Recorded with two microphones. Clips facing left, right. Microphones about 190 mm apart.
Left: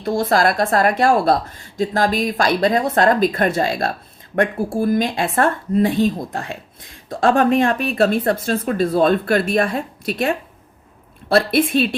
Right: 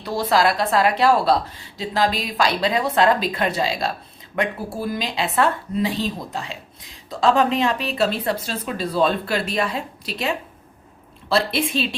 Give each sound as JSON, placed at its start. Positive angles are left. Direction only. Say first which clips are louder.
{"t": 0.0, "sound": "a woman's voice", "louder": "left 2 dB", "side_deg": 50}